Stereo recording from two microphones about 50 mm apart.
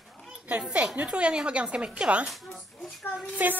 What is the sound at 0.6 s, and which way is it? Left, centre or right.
A woman's voice, right.